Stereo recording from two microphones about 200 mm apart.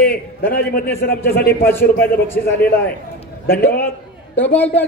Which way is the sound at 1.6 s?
10° left (ahead or behind).